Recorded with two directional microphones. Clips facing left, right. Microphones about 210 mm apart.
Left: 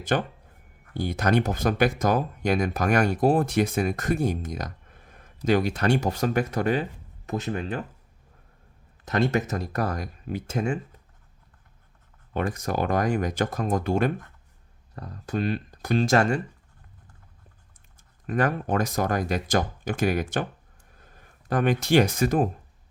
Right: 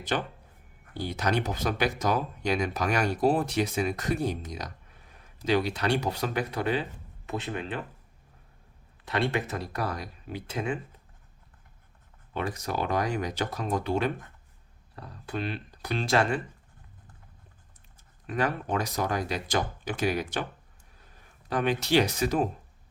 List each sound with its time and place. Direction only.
0.1 s speech: 50° left (ahead or behind)
9.0 s speech: 45° left (ahead or behind)
12.3 s speech: 50° left (ahead or behind)
18.3 s speech: 50° left (ahead or behind)
21.5 s speech: 50° left (ahead or behind)